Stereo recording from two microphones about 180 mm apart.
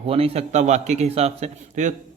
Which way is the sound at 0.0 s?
30° right (ahead or behind).